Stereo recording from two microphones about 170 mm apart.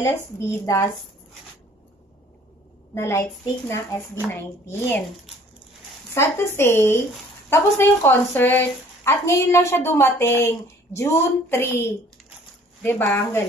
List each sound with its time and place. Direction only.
2.9 s a woman's voice: 15° left (ahead or behind)
6.1 s a woman's voice: 15° left (ahead or behind)